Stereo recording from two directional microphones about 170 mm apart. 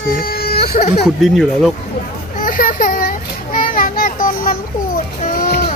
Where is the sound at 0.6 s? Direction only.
40° left (ahead or behind).